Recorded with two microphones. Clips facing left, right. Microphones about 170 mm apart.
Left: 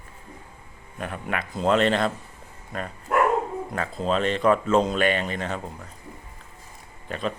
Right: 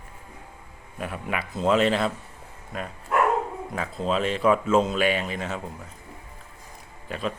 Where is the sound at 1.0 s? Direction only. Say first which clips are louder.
Even; 5° right (ahead or behind).